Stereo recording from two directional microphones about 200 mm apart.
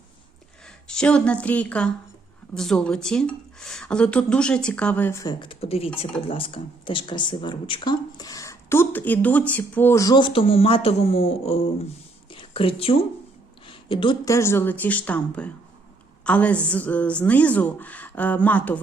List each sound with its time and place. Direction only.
0.6 s a woman's voice: 5° left (ahead or behind)